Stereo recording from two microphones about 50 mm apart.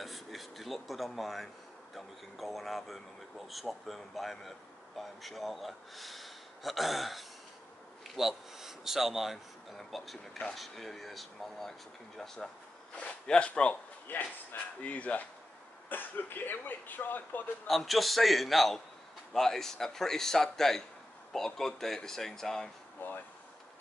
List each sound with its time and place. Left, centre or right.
0.0 s a sound: centre
2.0 s a man's voice: centre
12.9 s speech: left
14.0 s speech: left
14.8 s speech: left
15.9 s speech: left
17.6 s a man's voice: centre
22.9 s a sound: left